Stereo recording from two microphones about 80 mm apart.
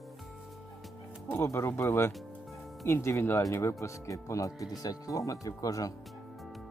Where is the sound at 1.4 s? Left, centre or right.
Left.